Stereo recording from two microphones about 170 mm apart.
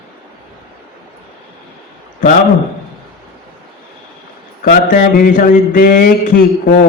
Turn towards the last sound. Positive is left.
turn(degrees=55)  # may be behind; listen again after turning